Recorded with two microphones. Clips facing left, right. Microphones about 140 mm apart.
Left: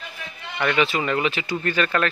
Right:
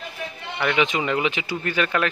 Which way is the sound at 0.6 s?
15° right (ahead or behind).